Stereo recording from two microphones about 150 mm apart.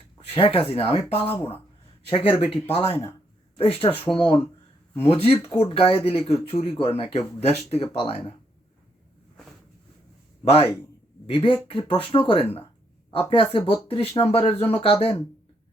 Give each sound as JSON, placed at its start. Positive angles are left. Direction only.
{"t": 0.3, "sound": "speech", "side_deg": 40}
{"t": 10.4, "sound": "speech", "side_deg": 40}